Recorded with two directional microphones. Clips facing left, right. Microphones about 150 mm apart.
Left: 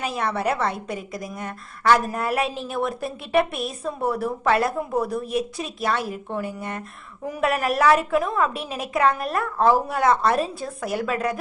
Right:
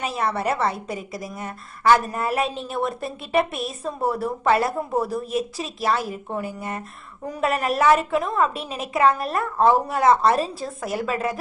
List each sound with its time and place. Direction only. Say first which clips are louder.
0.0 s a woman's voice: even; centre (ahead or behind)